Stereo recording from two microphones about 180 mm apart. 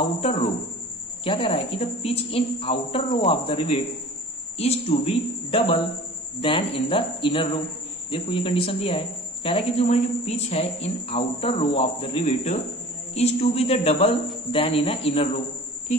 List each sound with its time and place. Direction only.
0.0 s speech: 35° left (ahead or behind)